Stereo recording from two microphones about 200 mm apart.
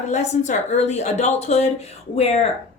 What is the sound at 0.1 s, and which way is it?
A woman's voice, 35° left (ahead or behind).